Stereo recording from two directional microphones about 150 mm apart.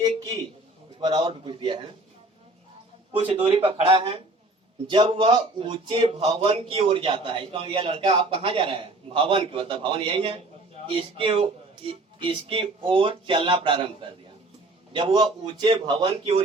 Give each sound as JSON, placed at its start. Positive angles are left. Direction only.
{"t": 0.9, "sound": "a man's voice", "side_deg": -30}
{"t": 3.1, "sound": "a man's voice", "side_deg": -40}
{"t": 14.9, "sound": "a man's voice", "side_deg": -30}